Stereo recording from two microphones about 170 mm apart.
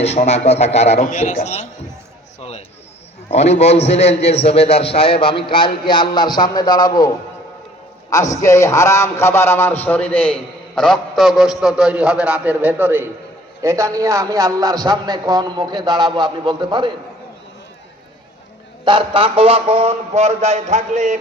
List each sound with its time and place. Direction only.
0.0 s a man's voice: 40° left (ahead or behind)
2.4 s a sound: 35° left (ahead or behind)
3.2 s a man's voice: 40° left (ahead or behind)
8.1 s a man's voice: 20° left (ahead or behind); by 16.9 s 25° right (ahead or behind)
18.9 s speech: 30° right (ahead or behind); by 21.2 s 45° right (ahead or behind)